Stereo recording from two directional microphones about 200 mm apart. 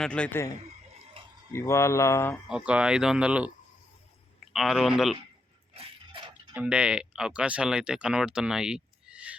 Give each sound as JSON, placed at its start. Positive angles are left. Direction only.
{"t": 0.0, "sound": "mantra", "side_deg": 5}
{"t": 1.5, "sound": "mantra", "side_deg": 15}
{"t": 2.5, "sound": "speech", "side_deg": -5}
{"t": 4.5, "sound": "speech", "side_deg": 0}
{"t": 5.7, "sound": "dog", "side_deg": -25}
{"t": 6.5, "sound": "speech", "side_deg": -5}